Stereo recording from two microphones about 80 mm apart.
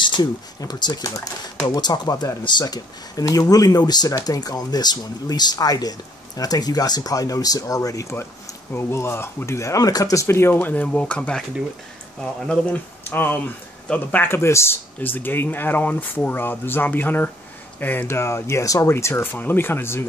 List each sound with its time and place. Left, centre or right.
0.0 s a sound: left
0.6 s speech: left
2.6 s speech: left
10.2 s speech: left; by 12.8 s centre
13.1 s speech: left
15.0 s speech: left